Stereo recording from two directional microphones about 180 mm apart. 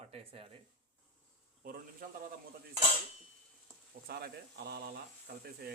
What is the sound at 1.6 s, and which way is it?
Speech, 50° right (ahead or behind).